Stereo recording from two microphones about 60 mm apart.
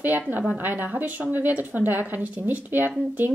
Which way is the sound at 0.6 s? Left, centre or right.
Right.